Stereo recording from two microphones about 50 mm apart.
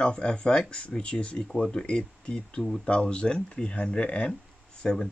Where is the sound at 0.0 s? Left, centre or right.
Centre.